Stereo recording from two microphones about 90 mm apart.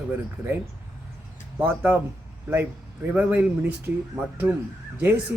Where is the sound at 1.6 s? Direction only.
20° right (ahead or behind).